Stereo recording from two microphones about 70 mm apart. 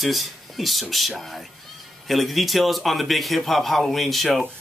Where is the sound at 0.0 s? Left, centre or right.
Centre.